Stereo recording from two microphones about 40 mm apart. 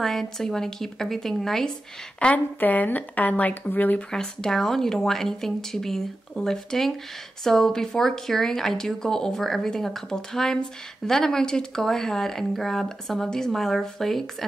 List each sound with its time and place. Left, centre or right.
0.0 s speech: centre
2.3 s speech: left
4.1 s speech: centre